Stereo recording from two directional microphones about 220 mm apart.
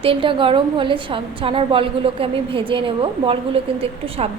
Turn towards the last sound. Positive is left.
turn(degrees=-25)  # may be behind; listen again after turning